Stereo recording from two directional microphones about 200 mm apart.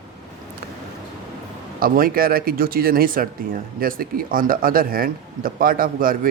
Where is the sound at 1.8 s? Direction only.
45° right (ahead or behind).